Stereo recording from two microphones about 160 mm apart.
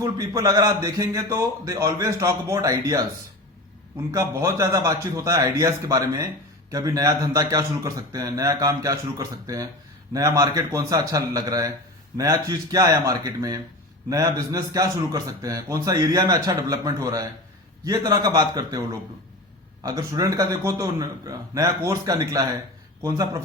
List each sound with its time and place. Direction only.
0.0 s a man's voice: 20° right (ahead or behind)
19.8 s a man's voice: 20° right (ahead or behind)